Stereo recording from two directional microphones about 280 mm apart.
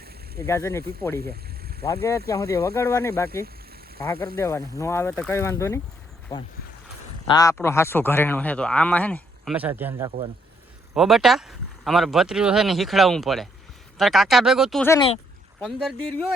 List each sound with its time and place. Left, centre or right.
0.3 s speech: centre
1.2 s a sound: right
1.8 s speech: centre
7.3 s speech: centre